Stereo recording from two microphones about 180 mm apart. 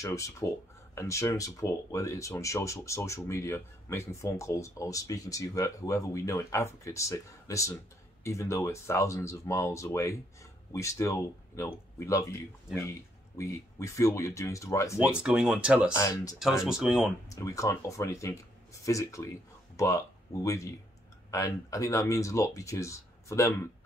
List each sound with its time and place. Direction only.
0.0 s speech: 15° left (ahead or behind)
13.4 s speech: 15° left (ahead or behind)
15.0 s speech: 5° right (ahead or behind)
15.9 s speech: 20° left (ahead or behind)
16.6 s speech: 5° right (ahead or behind)
17.3 s speech: 15° left (ahead or behind)